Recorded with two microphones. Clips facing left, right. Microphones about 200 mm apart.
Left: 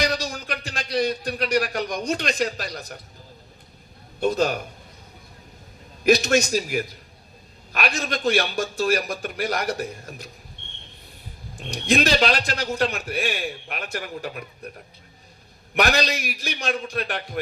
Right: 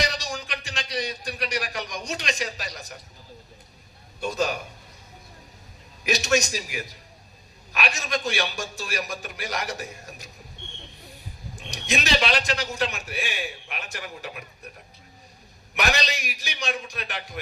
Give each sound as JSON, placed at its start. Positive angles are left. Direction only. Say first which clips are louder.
{"t": 0.1, "sound": "a man's voice", "louder": "left 5 dB", "side_deg": 55}
{"t": 4.3, "sound": "a man's voice", "louder": "left 4 dB", "side_deg": 55}
{"t": 6.0, "sound": "a man's voice", "louder": "left 5 dB", "side_deg": 55}
{"t": 11.7, "sound": "a man's voice", "louder": "left 6 dB", "side_deg": 50}
{"t": 15.7, "sound": "a man's voice", "louder": "left 5 dB", "side_deg": 55}